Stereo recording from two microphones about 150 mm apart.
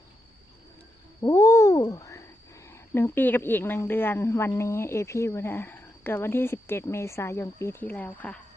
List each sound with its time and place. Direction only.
1.2 s speech: 20° left (ahead or behind)